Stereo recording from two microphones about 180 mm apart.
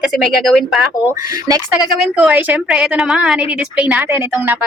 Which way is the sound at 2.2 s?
5° right (ahead or behind).